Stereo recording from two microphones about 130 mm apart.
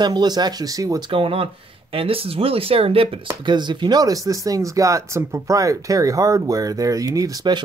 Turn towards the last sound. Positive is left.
turn(degrees=-30)  # may be behind; listen again after turning